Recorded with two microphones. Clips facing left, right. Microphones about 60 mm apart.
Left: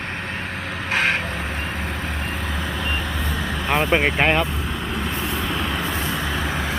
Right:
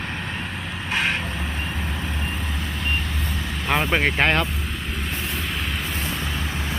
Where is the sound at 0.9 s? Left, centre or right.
Left.